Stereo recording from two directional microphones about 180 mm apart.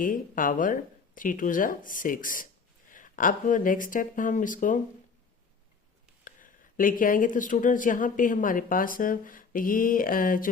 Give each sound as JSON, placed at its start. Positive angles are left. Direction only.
{"t": 0.0, "sound": "speech", "side_deg": 50}
{"t": 6.2, "sound": "speech", "side_deg": 50}